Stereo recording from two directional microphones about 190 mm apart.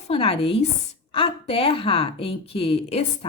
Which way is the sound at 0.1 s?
30° left (ahead or behind).